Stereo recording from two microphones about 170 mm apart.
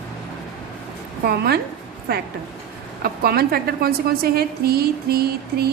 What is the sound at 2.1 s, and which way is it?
A woman's voice, 70° right (ahead or behind).